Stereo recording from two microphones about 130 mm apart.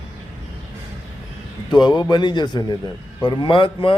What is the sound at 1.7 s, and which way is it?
A man's voice, 35° left (ahead or behind).